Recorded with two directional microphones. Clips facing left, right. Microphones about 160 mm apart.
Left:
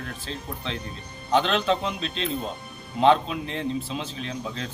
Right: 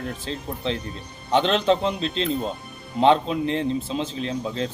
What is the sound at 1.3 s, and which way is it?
A man's voice, 30° right (ahead or behind).